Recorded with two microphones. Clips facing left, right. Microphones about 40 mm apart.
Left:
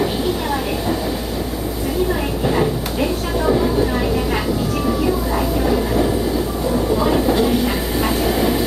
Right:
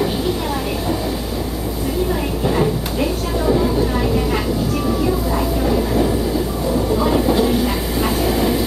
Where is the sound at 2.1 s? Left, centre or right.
Centre.